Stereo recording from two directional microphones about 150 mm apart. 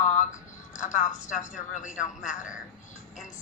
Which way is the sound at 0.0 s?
55° left (ahead or behind).